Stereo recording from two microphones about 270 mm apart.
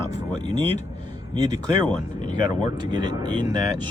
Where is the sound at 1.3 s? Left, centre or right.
Centre.